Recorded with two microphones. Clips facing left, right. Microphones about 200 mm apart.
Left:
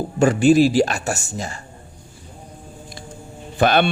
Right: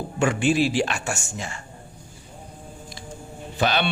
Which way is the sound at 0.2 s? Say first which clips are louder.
Left 7 dB; 40° left (ahead or behind).